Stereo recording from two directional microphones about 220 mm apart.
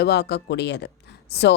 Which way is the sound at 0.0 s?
50° left (ahead or behind).